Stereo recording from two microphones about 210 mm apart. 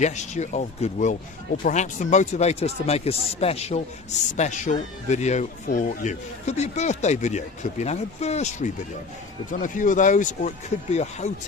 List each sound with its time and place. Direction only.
0.0 s speech: 35° left (ahead or behind)